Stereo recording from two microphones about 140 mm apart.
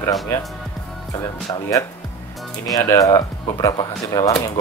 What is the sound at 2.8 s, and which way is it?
Speech, 25° left (ahead or behind).